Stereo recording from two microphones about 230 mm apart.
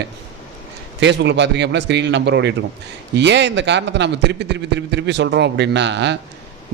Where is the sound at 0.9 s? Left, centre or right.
Right.